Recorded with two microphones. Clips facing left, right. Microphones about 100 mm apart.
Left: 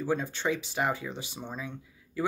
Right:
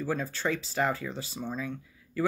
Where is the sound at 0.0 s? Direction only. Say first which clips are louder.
Left 1 dB; 20° left (ahead or behind).